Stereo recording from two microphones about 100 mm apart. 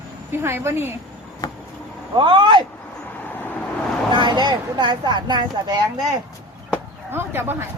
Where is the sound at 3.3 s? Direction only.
20° left (ahead or behind).